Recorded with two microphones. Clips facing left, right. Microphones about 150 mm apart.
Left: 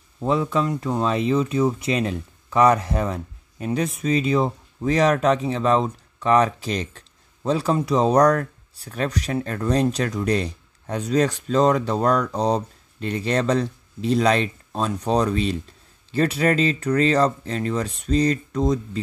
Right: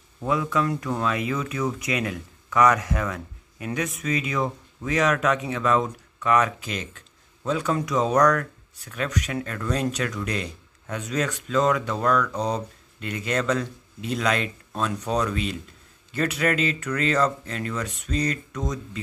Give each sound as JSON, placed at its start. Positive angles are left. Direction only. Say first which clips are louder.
{"t": 0.2, "sound": "speech", "louder": "left 3 dB", "side_deg": 30}